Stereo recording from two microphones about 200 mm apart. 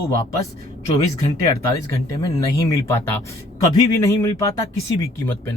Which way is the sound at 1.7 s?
15° left (ahead or behind).